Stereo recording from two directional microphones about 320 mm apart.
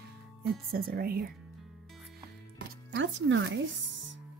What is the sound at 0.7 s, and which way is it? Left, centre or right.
Speech, right.